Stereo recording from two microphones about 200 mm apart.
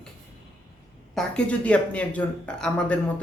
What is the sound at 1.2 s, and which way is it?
Speech, 5° left (ahead or behind).